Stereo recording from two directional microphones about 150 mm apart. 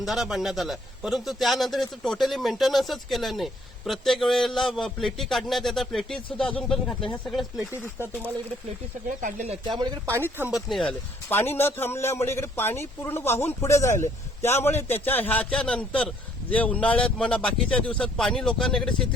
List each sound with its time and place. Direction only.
0.0 s a man's voice: centre (ahead or behind)
7.7 s speech: 15° right (ahead or behind)
9.2 s speech: 55° right (ahead or behind)
10.5 s a man's voice: centre (ahead or behind)
11.3 s speech: 15° left (ahead or behind)